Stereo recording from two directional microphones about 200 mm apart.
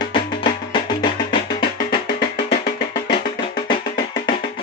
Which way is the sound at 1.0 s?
25° left (ahead or behind).